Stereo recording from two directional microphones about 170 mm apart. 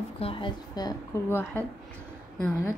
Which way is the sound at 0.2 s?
30° left (ahead or behind).